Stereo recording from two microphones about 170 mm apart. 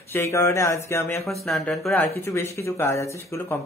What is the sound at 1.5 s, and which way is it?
Speech, 5° left (ahead or behind).